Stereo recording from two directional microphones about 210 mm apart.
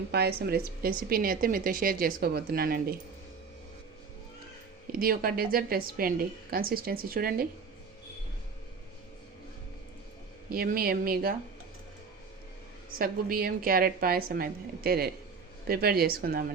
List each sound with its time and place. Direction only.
0.1 s a woman's voice: 50° right (ahead or behind)
4.9 s a woman's voice: 45° right (ahead or behind)
10.5 s a woman's voice: 45° right (ahead or behind)
13.0 s a woman's voice: 45° right (ahead or behind)